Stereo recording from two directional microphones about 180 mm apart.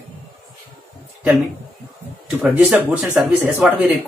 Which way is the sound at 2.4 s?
10° right (ahead or behind).